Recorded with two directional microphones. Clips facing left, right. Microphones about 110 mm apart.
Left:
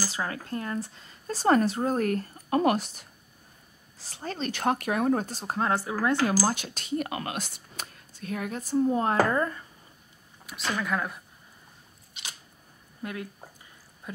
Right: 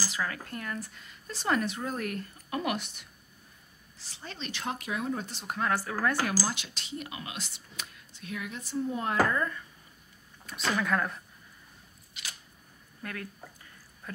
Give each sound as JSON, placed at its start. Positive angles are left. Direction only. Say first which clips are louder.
{"t": 0.0, "sound": "speech", "louder": "left 2 dB", "side_deg": 30}
{"t": 6.4, "sound": "speech", "louder": "left 7 dB", "side_deg": 45}
{"t": 10.4, "sound": "speech", "louder": "right 1 dB", "side_deg": 0}
{"t": 12.1, "sound": "a sound", "louder": "left 1 dB", "side_deg": 20}
{"t": 13.0, "sound": "speech", "louder": "left 4 dB", "side_deg": 20}
{"t": 14.1, "sound": "a sound", "louder": "left 3 dB", "side_deg": 15}